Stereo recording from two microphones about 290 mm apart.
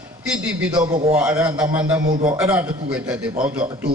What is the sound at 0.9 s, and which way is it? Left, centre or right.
Speech, right.